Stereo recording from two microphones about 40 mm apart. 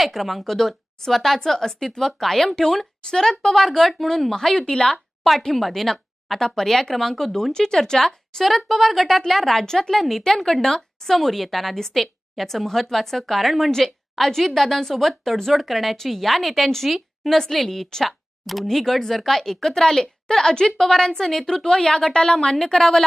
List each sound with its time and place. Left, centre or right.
0.0 s a woman's voice: centre
5.5 s a woman's voice: centre